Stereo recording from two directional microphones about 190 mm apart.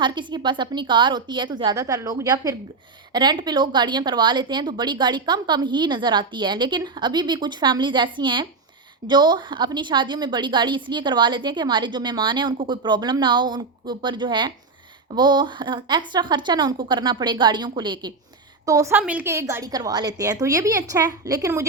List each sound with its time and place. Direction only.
0.0 s a woman's voice: 25° right (ahead or behind)